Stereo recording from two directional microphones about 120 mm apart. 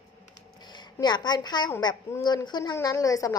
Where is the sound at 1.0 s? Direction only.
35° left (ahead or behind).